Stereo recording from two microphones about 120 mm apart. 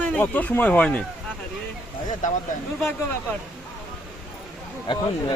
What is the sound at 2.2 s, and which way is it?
Speech, 90° left.